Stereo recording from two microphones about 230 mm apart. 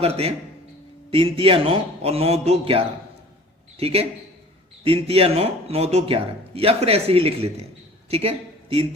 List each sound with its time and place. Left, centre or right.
0.0 s a man's voice: right